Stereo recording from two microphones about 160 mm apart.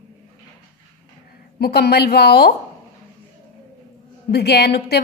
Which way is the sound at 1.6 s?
85° left.